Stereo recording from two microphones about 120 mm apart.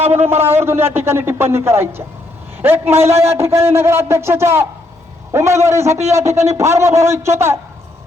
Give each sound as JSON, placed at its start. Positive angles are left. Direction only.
{"t": 0.3, "sound": "a man's voice", "side_deg": -20}